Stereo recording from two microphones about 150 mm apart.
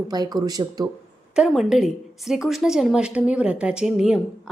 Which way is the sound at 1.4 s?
Centre (ahead or behind).